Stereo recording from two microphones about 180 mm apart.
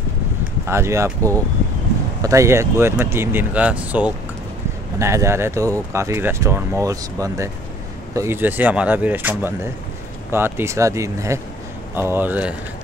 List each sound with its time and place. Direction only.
0.7 s speech: 15° right (ahead or behind)